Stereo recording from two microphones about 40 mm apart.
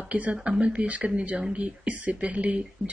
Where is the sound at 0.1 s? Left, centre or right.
Right.